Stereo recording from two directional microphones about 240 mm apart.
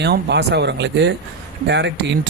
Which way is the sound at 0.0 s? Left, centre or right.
Right.